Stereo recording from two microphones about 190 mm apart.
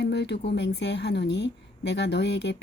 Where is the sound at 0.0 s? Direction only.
60° left (ahead or behind).